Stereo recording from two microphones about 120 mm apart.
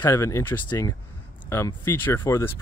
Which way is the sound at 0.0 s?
25° left (ahead or behind).